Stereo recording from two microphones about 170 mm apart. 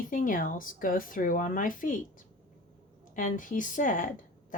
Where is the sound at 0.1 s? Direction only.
55° left (ahead or behind).